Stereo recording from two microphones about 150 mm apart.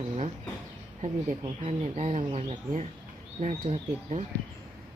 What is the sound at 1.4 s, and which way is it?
Speech, 45° right (ahead or behind).